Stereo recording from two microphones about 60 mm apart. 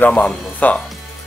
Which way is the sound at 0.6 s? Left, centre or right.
Left.